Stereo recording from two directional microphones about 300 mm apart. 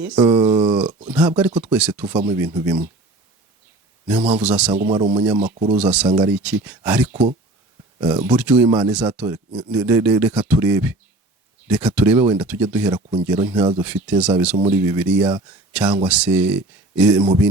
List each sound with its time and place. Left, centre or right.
0.2 s speech: centre
0.7 s a sound: centre
1.4 s speech: centre
4.1 s speech: centre
12.9 s speech: centre
13.2 s speech: centre